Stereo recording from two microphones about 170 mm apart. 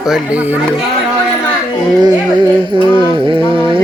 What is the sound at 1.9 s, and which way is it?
Music, 25° right (ahead or behind).